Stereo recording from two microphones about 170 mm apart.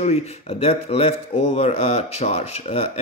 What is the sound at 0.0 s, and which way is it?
Speech, 35° left (ahead or behind).